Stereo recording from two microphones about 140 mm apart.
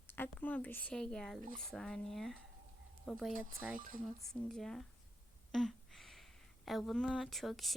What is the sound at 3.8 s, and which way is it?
Speech, 70° right (ahead or behind).